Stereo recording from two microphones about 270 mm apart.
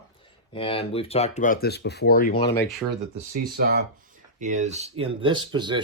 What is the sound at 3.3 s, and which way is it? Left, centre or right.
Speech, right.